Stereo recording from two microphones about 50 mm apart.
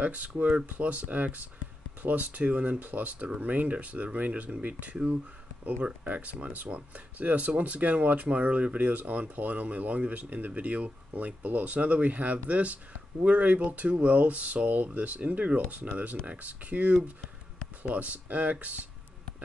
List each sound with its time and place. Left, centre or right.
0.0 s speech: right
6.0 s speech: right
17.9 s speech: right